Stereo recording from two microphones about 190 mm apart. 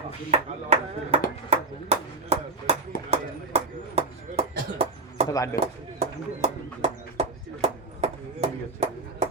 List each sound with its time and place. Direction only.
0.3 s speech: 30° right (ahead or behind)
5.3 s speech: 15° left (ahead or behind)
6.0 s speech: 35° right (ahead or behind)